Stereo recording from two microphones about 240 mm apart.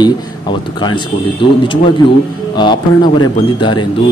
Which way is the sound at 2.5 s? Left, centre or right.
Centre.